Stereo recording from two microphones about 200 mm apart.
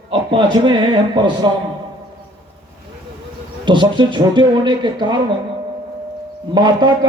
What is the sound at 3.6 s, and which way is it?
A man's voice, 20° right (ahead or behind).